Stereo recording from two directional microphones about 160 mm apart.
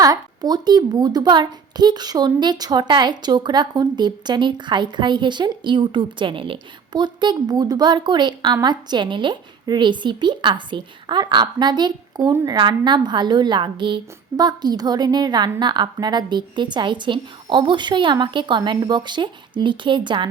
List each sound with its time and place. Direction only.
0.0 s a child's voice: 25° right (ahead or behind)